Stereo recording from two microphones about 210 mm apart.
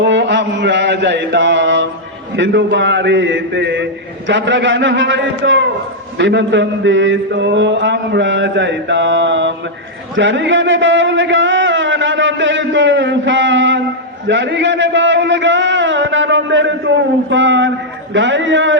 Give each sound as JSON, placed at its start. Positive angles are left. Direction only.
{"t": 0.0, "sound": "mantra", "side_deg": -55}
{"t": 2.3, "sound": "a man's voice", "side_deg": -55}